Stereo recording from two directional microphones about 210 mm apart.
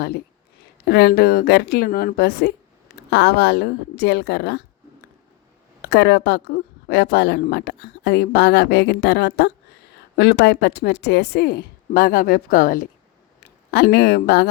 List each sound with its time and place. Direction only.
0.9 s speech: 50° left (ahead or behind)
5.8 s speech: 50° left (ahead or behind)